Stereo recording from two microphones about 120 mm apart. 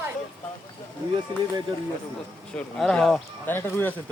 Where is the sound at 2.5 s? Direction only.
5° left (ahead or behind).